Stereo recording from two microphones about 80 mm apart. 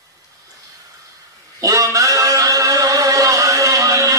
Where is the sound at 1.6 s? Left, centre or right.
Right.